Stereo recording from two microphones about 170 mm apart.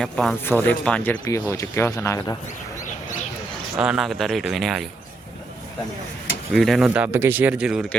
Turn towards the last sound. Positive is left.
turn(degrees=-5)  # may be behind; listen again after turning